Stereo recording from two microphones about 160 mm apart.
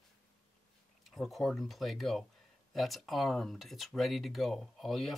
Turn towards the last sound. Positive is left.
turn(degrees=0)  # may be behind; listen again after turning